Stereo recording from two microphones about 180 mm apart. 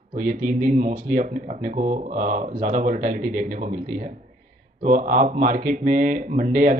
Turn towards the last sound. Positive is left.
turn(degrees=-45)  # may be behind; listen again after turning